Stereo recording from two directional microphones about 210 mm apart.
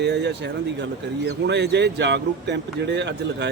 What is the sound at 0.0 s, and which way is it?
Speech, 55° right (ahead or behind).